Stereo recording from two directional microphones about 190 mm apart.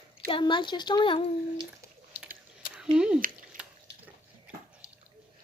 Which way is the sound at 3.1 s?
45° right (ahead or behind).